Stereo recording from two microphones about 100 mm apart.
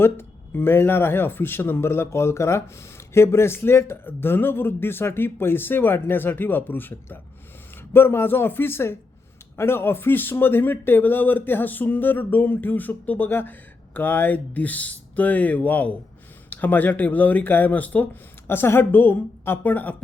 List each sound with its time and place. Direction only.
0.0 s speech: 25° left (ahead or behind)